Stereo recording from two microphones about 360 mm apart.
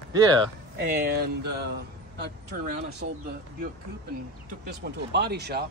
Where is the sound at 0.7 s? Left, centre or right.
Right.